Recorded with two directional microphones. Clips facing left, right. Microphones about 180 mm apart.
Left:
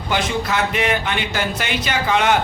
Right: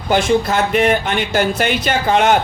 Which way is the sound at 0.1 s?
45° right (ahead or behind).